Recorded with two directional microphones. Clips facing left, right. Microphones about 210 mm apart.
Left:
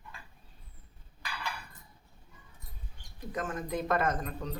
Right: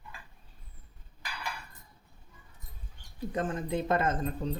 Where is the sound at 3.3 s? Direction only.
30° right (ahead or behind).